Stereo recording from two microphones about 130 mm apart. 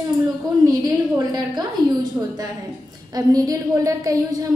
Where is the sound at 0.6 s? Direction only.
30° right (ahead or behind).